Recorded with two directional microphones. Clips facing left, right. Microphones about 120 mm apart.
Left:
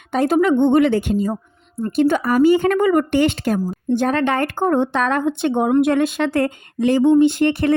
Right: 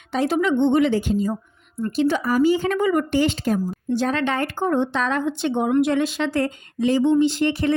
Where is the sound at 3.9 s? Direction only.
50° left (ahead or behind).